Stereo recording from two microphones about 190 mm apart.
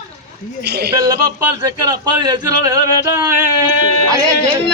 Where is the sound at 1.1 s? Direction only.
20° right (ahead or behind).